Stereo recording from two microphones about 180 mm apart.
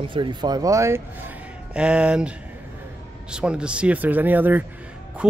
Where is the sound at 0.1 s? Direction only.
25° right (ahead or behind).